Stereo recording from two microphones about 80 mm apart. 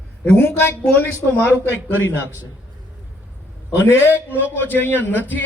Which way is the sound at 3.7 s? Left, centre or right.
Left.